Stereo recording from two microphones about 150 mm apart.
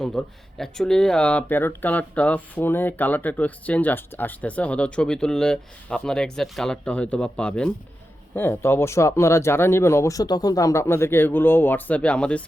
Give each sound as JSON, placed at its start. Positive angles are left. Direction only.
{"t": 0.0, "sound": "speech", "side_deg": 5}